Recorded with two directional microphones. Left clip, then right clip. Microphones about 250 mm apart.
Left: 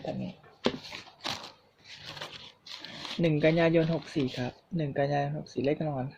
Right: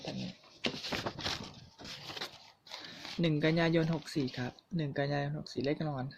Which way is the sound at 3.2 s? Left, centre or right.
Right.